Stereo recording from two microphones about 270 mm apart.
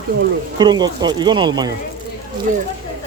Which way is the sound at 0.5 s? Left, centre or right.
Centre.